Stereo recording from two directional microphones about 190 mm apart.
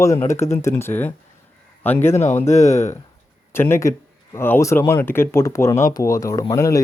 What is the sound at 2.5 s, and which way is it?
Speech, 35° left (ahead or behind).